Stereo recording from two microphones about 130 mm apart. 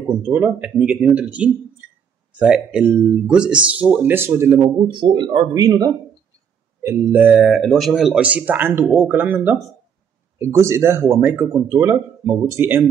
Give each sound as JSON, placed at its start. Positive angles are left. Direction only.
{"t": 0.2, "sound": "speech", "side_deg": -15}
{"t": 4.8, "sound": "speech", "side_deg": -35}
{"t": 6.8, "sound": "speech", "side_deg": -15}